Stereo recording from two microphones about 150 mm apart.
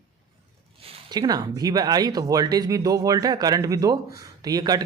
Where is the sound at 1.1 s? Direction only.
25° right (ahead or behind).